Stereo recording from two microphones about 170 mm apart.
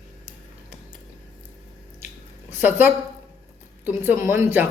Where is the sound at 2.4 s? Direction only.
10° right (ahead or behind).